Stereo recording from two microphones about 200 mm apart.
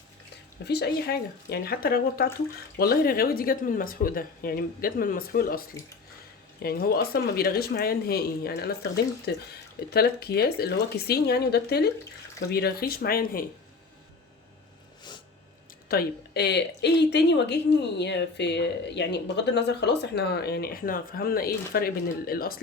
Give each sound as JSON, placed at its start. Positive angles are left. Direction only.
{"t": 0.6, "sound": "speech", "side_deg": 55}
{"t": 15.9, "sound": "speech", "side_deg": 55}